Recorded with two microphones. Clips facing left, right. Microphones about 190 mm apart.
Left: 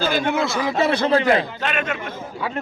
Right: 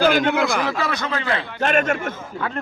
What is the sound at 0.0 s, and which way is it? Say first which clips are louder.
Speech: right 3 dB; 65° right (ahead or behind).